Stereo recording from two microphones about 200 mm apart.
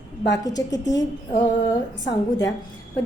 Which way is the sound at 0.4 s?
20° left (ahead or behind).